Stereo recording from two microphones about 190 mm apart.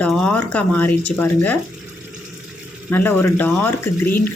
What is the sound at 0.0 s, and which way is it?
Speech, 5° left (ahead or behind).